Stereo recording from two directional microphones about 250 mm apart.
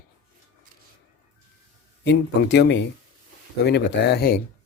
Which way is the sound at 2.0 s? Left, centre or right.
Left.